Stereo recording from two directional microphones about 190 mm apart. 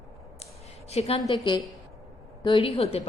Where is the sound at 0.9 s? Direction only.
35° left (ahead or behind).